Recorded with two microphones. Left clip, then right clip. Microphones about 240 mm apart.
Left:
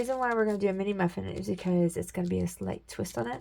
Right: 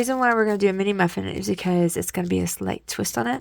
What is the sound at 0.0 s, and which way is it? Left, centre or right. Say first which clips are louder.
Speech: right 8 dB; right.